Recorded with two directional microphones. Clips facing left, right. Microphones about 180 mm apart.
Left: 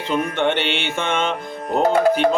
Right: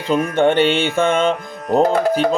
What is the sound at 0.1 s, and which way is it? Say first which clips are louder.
Music: right 5 dB; 40° right (ahead or behind).